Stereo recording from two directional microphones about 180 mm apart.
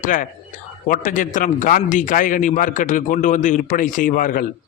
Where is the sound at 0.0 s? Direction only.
45° left (ahead or behind).